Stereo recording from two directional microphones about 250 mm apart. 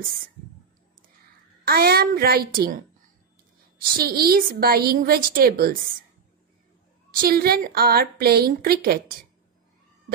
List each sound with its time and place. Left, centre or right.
1.6 s a woman's voice: right
3.9 s a woman's voice: right
7.2 s a woman's voice: right